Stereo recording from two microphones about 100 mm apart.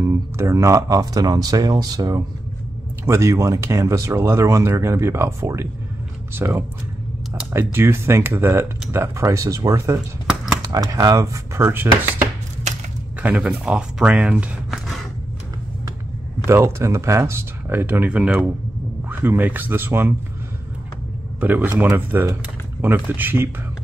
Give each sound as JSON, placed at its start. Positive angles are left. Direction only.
{"t": 0.0, "sound": "speech", "side_deg": -30}
{"t": 13.2, "sound": "speech", "side_deg": -15}
{"t": 16.4, "sound": "speech", "side_deg": -30}
{"t": 21.4, "sound": "speech", "side_deg": -20}